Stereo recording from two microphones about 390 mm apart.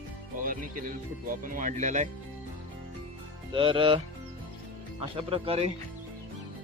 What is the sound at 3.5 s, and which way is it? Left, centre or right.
Speech, centre.